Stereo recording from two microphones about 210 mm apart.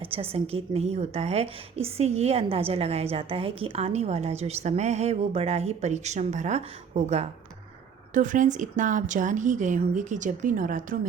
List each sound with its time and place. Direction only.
0.1 s a woman's voice: 30° right (ahead or behind)